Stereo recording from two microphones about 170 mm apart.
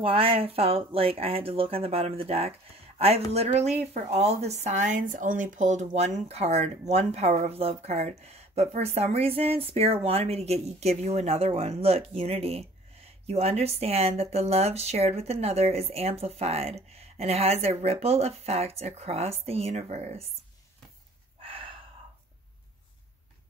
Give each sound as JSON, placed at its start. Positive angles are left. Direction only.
{"t": 0.0, "sound": "speech", "side_deg": -35}
{"t": 21.4, "sound": "gasp", "side_deg": -30}